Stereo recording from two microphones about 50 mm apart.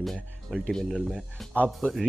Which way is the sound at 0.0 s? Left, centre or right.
Centre.